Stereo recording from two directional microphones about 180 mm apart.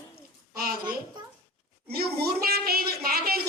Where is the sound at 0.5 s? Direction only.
55° right (ahead or behind).